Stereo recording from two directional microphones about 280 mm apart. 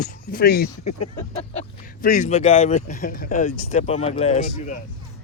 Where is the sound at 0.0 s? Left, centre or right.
Left.